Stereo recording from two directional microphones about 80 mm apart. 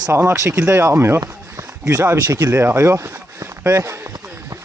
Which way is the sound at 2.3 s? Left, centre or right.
Right.